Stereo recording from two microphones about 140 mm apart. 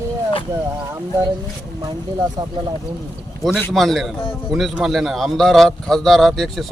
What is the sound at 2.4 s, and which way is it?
Speech, 30° right (ahead or behind).